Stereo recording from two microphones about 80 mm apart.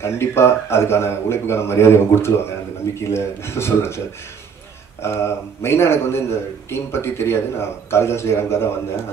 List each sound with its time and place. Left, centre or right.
0.0 s a man's voice: left
5.0 s a man's voice: left